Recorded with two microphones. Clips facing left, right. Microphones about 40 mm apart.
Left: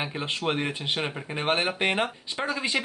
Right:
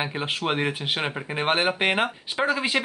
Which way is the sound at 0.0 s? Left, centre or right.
Right.